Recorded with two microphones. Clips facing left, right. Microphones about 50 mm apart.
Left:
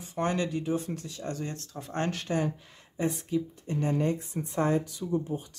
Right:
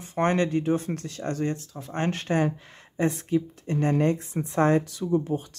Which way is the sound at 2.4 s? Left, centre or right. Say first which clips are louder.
Right 5 dB; right.